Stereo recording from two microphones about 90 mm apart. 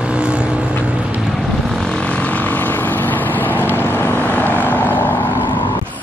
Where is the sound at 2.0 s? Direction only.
15° left (ahead or behind).